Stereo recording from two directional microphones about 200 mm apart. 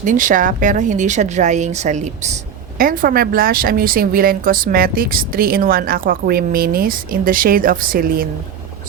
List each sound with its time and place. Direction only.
0.0 s speech: 40° right (ahead or behind)
2.7 s speech: 45° right (ahead or behind)